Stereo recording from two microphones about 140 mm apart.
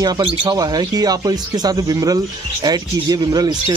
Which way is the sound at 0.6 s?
25° right (ahead or behind).